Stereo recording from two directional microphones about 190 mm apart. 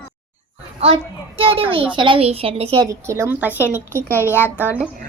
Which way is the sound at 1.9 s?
25° right (ahead or behind).